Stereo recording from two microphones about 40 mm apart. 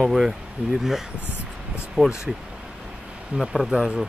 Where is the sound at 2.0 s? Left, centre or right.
Right.